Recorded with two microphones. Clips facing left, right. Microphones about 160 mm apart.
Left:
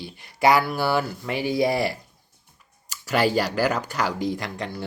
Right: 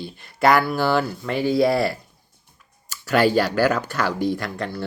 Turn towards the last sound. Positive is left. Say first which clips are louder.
# right 3 dB
turn(degrees=20)  # may be behind; listen again after turning